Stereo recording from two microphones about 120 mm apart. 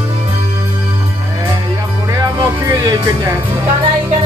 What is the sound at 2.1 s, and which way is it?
Music, 30° right (ahead or behind).